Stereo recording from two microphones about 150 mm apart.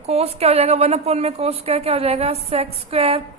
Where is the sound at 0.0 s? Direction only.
45° right (ahead or behind).